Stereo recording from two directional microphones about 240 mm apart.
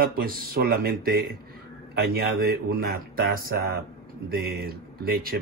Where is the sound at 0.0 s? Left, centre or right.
Right.